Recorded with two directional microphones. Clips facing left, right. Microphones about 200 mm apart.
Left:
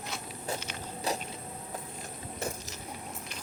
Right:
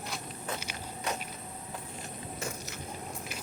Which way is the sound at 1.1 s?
35° left (ahead or behind).